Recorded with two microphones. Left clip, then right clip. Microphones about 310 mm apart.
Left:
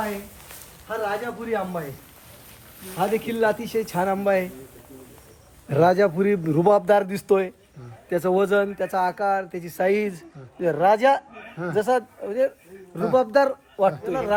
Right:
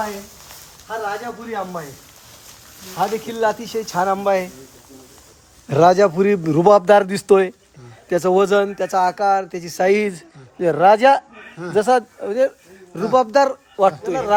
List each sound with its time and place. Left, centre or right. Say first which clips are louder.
0.4 s speech: right 1 dB; centre
2.9 s speech: right 2 dB; centre
5.6 s a man's voice: right 5 dB; right